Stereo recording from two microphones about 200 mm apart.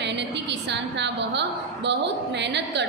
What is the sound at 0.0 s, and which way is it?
A woman's voice, 60° right (ahead or behind).